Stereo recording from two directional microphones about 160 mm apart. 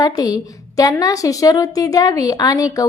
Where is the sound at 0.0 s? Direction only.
20° left (ahead or behind).